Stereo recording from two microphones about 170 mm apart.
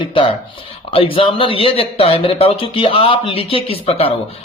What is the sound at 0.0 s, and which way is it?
Speech, 30° left (ahead or behind).